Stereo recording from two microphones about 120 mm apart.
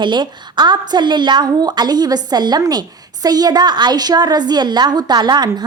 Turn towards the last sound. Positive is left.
turn(degrees=-35)  # may be behind; listen again after turning